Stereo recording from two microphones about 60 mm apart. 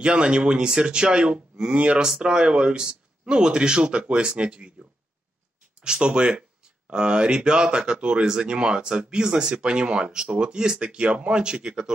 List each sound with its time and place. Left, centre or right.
0.0 s speech: centre
5.8 s speech: centre